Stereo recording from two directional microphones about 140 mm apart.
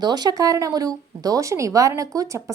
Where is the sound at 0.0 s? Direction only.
30° right (ahead or behind).